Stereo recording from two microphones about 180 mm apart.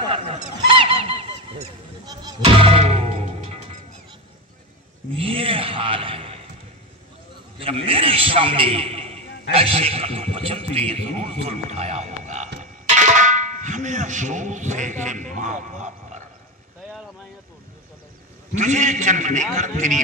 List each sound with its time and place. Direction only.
0.0 s speech: 30° right (ahead or behind)
5.1 s a man's voice: 30° right (ahead or behind)
7.5 s a man's voice: 30° right (ahead or behind)
18.5 s a man's voice: 40° right (ahead or behind)